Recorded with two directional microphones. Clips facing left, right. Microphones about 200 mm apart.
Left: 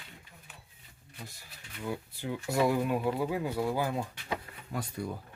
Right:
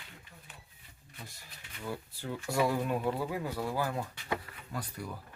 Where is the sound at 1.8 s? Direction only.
10° left (ahead or behind).